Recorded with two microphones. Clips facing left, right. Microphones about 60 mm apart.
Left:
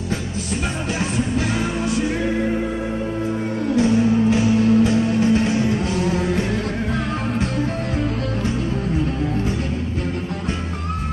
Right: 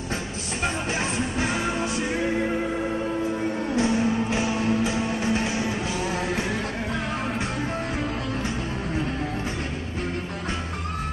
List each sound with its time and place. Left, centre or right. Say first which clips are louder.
3.7 s music: left 7 dB; right